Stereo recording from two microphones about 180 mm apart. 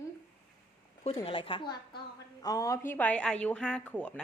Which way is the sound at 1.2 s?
30° left (ahead or behind).